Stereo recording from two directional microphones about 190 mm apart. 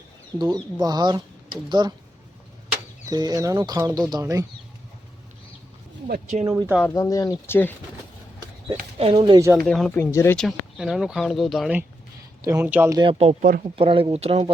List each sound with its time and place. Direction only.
0.3 s speech: 20° right (ahead or behind)
3.1 s speech: 20° right (ahead or behind)
6.1 s speech: 40° right (ahead or behind)
6.5 s speech: 15° right (ahead or behind)
6.8 s speech: 20° left (ahead or behind)
9.0 s speech: 25° right (ahead or behind)
9.6 s speech: centre (ahead or behind)
10.0 s speech: 15° left (ahead or behind)
10.3 s speech: centre (ahead or behind)
12.4 s speech: 15° right (ahead or behind)
13.0 s speech: 30° right (ahead or behind)